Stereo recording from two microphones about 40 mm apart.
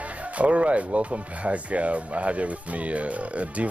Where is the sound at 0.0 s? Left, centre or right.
Right.